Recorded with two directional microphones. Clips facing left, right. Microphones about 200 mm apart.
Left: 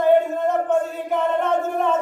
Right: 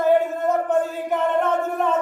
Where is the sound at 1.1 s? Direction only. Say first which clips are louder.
Even; centre (ahead or behind).